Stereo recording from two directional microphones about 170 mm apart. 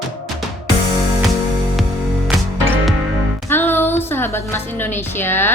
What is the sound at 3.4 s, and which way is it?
A woman's voice, 10° left (ahead or behind).